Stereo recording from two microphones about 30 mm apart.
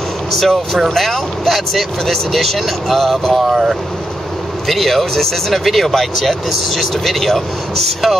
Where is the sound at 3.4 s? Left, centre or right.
Centre.